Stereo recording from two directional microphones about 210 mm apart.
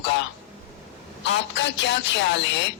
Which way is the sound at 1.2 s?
55° left (ahead or behind).